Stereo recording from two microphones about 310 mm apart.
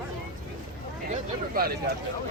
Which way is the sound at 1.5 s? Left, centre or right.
Right.